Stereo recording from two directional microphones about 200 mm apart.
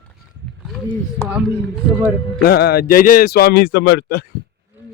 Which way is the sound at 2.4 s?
50° left (ahead or behind).